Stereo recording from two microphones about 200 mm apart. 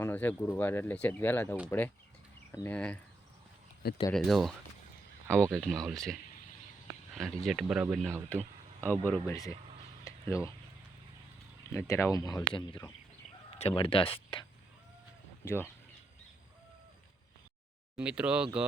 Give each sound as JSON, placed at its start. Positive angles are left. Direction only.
{"t": 0.0, "sound": "speech", "side_deg": 10}
{"t": 4.1, "sound": "speech", "side_deg": 0}
{"t": 5.5, "sound": "speech", "side_deg": 0}
{"t": 7.2, "sound": "speech", "side_deg": 0}
{"t": 8.3, "sound": "speech", "side_deg": 10}
{"t": 10.0, "sound": "a sound", "side_deg": 15}
{"t": 11.7, "sound": "speech", "side_deg": 15}
{"t": 15.4, "sound": "speech", "side_deg": 10}
{"t": 17.9, "sound": "speech", "side_deg": -5}